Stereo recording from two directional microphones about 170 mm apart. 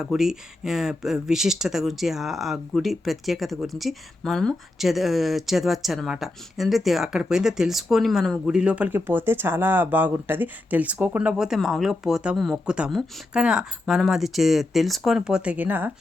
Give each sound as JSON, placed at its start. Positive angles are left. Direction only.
{"t": 0.0, "sound": "speech", "side_deg": 0}